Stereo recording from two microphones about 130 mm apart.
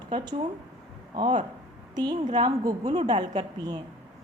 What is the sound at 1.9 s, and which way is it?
A woman's voice, 30° right (ahead or behind).